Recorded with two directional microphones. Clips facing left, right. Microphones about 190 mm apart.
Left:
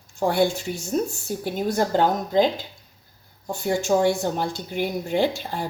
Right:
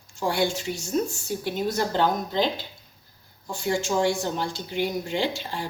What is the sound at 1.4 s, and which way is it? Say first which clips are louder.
A woman's voice: left 3 dB; 50° left (ahead or behind).